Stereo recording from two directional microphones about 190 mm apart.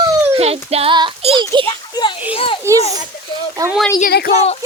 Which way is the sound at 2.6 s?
15° right (ahead or behind).